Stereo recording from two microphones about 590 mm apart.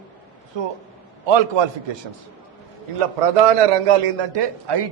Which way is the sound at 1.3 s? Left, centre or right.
Right.